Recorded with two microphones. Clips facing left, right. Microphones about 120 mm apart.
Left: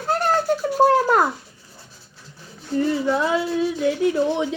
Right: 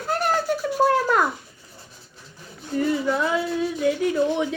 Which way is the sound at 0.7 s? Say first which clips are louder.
Left 3 dB; 35° left (ahead or behind).